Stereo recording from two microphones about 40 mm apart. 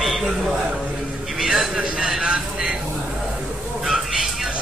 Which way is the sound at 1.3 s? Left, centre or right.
Centre.